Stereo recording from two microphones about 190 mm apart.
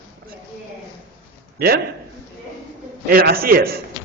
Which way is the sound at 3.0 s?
50° right (ahead or behind).